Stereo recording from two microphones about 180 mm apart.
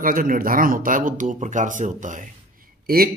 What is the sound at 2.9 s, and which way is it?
Speech, 55° right (ahead or behind).